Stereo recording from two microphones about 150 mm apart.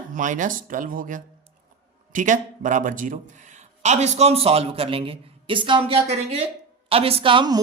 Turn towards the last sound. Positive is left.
turn(degrees=-30)  # may be behind; listen again after turning